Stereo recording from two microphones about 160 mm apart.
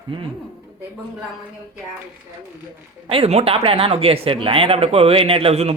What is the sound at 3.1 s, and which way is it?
Speech, 40° right (ahead or behind).